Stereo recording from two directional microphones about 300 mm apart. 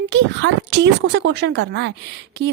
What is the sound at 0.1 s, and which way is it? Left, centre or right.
A woman's voice, right.